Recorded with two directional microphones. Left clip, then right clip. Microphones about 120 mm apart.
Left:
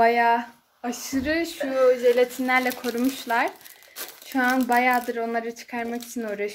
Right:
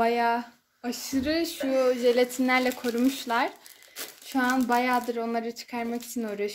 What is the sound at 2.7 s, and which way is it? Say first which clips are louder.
Speech: left 1 dB; 5° right (ahead or behind).